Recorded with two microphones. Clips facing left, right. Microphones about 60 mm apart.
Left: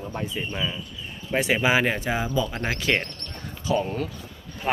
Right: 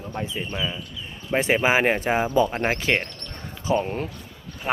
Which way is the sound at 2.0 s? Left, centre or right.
Right.